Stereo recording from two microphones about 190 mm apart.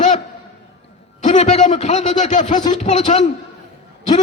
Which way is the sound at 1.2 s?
40° left (ahead or behind).